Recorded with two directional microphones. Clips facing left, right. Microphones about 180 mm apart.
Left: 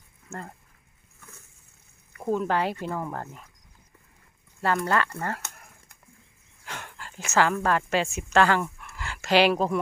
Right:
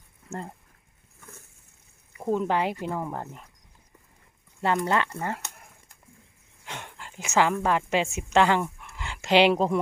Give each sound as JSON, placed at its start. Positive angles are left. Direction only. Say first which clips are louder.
{"t": 0.3, "sound": "speech", "louder": "right 3 dB", "side_deg": -25}
{"t": 2.3, "sound": "speech", "louder": "even", "side_deg": -20}
{"t": 4.6, "sound": "speech", "louder": "even", "side_deg": -20}
{"t": 6.7, "sound": "a woman's voice", "louder": "even", "side_deg": -20}